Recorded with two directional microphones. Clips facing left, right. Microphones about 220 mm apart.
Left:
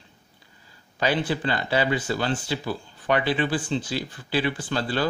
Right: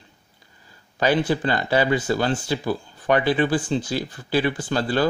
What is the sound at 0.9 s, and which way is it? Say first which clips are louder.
Speech: right 4 dB; 45° right (ahead or behind).